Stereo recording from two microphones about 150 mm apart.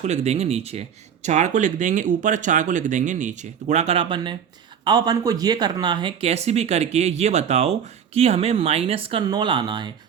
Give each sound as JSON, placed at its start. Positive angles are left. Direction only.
{"t": 0.0, "sound": "speech", "side_deg": -50}